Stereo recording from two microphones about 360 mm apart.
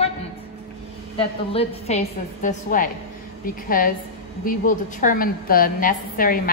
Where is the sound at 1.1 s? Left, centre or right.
Centre.